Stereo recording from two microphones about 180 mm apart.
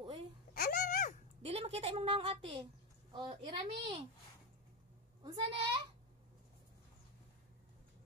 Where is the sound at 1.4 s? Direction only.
35° right (ahead or behind).